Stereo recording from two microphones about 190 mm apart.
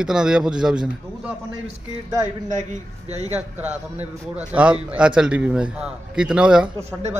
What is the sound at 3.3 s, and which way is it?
A man's voice, 10° right (ahead or behind).